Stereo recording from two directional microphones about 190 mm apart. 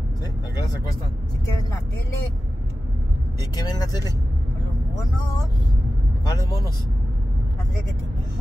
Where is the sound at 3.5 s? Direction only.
20° left (ahead or behind).